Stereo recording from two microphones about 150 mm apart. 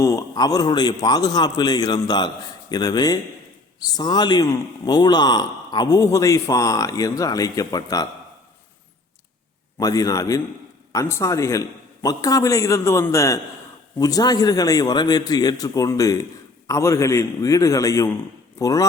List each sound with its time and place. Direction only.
0.0 s a man's voice: 20° left (ahead or behind)
9.7 s a man's voice: 25° left (ahead or behind)